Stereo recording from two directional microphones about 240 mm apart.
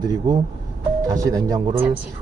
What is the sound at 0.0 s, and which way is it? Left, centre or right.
Speech, centre.